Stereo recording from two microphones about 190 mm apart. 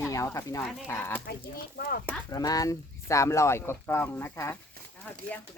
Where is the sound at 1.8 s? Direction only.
55° left (ahead or behind).